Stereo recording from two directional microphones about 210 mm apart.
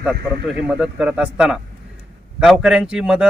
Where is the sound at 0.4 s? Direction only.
5° right (ahead or behind).